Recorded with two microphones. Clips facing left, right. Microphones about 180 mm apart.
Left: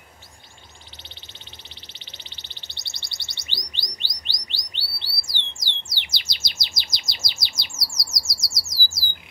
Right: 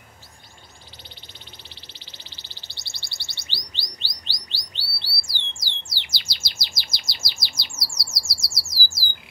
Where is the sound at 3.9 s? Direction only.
15° left (ahead or behind).